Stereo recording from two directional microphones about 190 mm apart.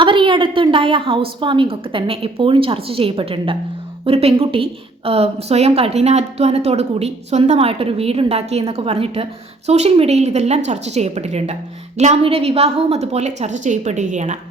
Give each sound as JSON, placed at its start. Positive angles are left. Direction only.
{"t": 0.0, "sound": "a woman's voice", "side_deg": -25}